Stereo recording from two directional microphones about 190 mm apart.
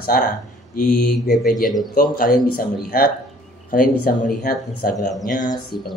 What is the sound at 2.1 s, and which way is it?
A man's voice, 50° left (ahead or behind).